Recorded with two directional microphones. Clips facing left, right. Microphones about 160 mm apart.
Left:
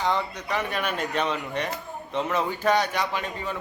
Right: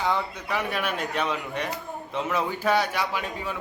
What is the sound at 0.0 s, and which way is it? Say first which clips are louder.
A man's voice: left 1 dB; 5° right (ahead or behind).